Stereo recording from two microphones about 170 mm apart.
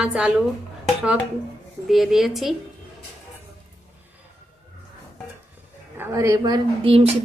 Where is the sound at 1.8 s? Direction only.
Centre (ahead or behind).